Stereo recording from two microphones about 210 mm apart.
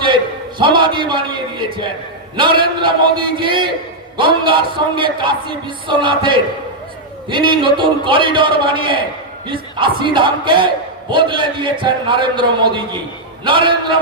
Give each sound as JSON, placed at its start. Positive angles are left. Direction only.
{"t": 0.6, "sound": "speech", "side_deg": -25}